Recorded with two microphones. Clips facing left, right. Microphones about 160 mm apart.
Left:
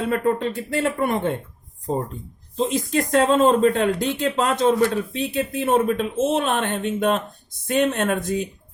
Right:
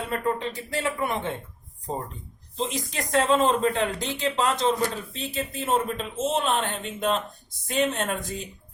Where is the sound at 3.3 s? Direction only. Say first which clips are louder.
Left 5 dB; 45° left (ahead or behind).